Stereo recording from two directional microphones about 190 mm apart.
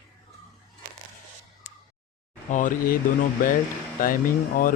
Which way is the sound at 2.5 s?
45° left (ahead or behind).